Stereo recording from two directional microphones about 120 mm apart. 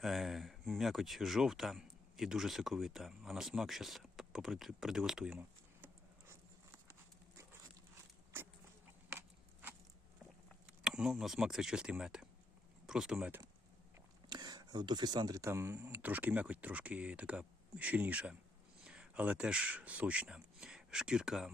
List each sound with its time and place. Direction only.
0.0 s speech: centre (ahead or behind)
8.3 s a sound: 20° right (ahead or behind)
10.7 s speech: 5° right (ahead or behind)
14.3 s speech: 35° right (ahead or behind); by 21.5 s 5° right (ahead or behind)